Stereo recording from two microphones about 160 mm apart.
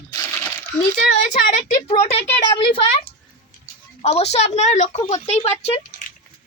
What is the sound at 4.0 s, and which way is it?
A woman's voice, 40° left (ahead or behind).